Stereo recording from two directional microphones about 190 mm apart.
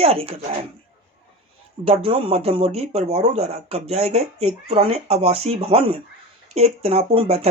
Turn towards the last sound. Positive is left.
turn(degrees=-30)  # may be behind; listen again after turning